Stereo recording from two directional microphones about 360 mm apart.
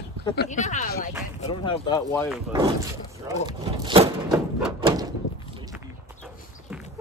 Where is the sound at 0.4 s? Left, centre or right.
Centre.